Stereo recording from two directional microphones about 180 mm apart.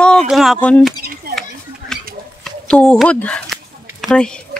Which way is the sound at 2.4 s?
5° left (ahead or behind).